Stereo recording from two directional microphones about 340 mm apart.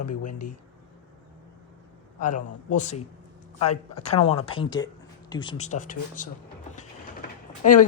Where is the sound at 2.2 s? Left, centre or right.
Left.